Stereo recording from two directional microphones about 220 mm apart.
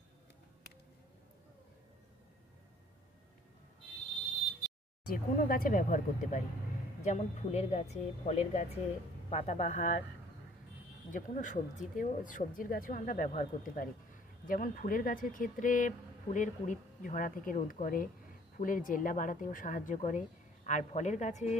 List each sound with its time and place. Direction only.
5.0 s speech: 40° left (ahead or behind)
11.1 s speech: 35° left (ahead or behind)